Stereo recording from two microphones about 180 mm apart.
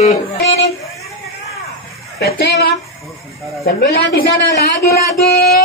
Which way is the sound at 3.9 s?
65° left (ahead or behind).